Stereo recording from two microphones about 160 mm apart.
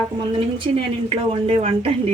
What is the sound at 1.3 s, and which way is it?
Speech, 35° right (ahead or behind).